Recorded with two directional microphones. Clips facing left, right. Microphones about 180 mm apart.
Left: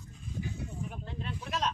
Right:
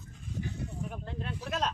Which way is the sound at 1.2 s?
50° right (ahead or behind).